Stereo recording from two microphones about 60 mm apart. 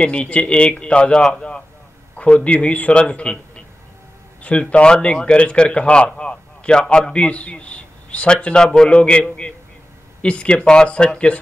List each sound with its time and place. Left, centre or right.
0.0 s a man's voice: centre
10.2 s a man's voice: centre